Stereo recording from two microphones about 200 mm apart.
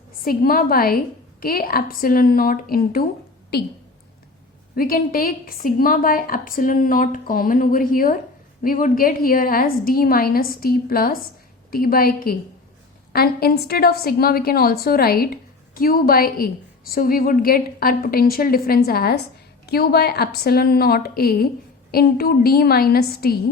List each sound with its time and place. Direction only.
0.3 s a woman's voice: 45° left (ahead or behind)
4.7 s a woman's voice: 45° left (ahead or behind)